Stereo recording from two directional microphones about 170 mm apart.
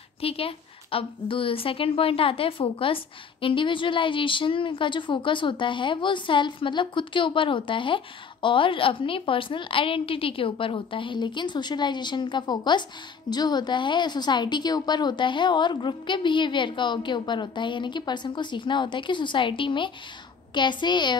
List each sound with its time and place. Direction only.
0.2 s a woman's voice: 35° left (ahead or behind)